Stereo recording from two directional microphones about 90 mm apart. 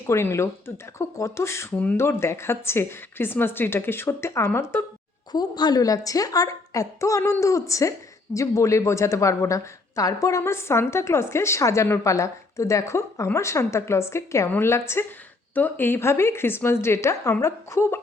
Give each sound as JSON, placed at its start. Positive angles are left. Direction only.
{"t": 0.1, "sound": "a woman's voice", "side_deg": 30}
{"t": 5.3, "sound": "a woman's voice", "side_deg": 50}